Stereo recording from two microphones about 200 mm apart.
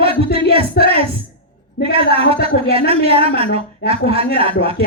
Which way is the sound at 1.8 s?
55° left (ahead or behind).